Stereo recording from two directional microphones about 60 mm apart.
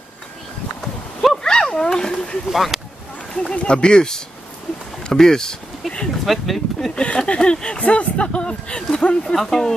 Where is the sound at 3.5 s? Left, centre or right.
Centre.